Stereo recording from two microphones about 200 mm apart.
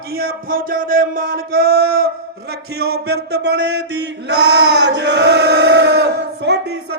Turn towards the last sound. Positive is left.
turn(degrees=-55)  # may be behind; listen again after turning